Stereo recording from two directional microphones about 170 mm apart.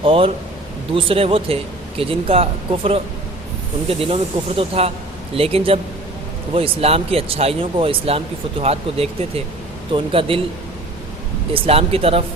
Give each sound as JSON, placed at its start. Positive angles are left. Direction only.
{"t": 0.0, "sound": "a man's voice", "side_deg": -30}
{"t": 11.5, "sound": "speech", "side_deg": -35}